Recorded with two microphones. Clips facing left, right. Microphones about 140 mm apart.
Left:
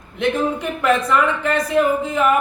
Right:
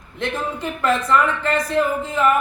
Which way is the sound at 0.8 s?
15° left (ahead or behind).